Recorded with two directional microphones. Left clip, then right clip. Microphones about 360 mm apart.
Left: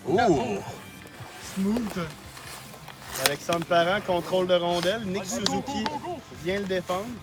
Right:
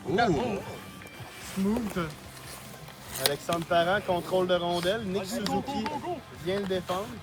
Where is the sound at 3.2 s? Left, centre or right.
Centre.